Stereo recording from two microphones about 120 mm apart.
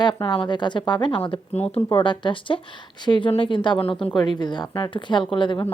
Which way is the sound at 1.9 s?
45° left (ahead or behind).